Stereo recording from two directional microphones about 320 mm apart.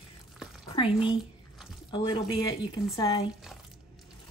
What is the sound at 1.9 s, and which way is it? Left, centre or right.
Speech, centre.